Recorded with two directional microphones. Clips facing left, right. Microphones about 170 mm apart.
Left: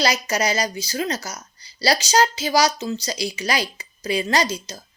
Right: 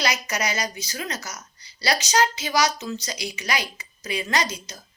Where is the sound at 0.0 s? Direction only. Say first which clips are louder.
Left 5 dB; 30° left (ahead or behind).